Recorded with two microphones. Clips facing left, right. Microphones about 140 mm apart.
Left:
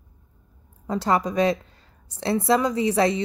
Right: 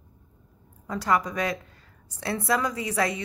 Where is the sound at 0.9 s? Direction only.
25° left (ahead or behind).